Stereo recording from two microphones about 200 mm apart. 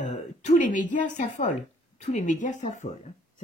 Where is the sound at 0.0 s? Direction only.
35° left (ahead or behind).